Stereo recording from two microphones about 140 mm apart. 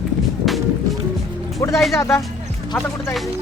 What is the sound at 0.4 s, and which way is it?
Music, centre (ahead or behind).